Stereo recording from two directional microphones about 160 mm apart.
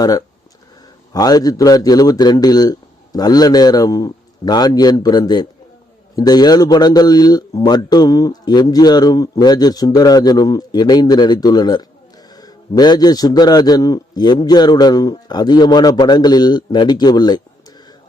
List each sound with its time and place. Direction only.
0.0 s a man's voice: 25° left (ahead or behind)